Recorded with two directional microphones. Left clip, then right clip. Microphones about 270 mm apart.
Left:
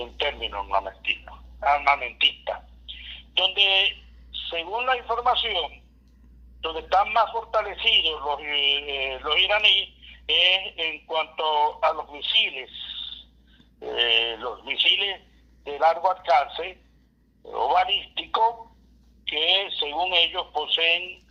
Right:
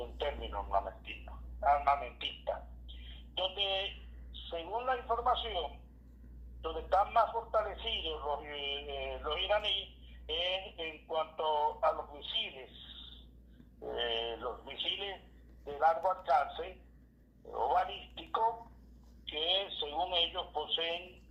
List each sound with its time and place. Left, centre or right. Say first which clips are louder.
0.0 s a woman's voice: left 11 dB; left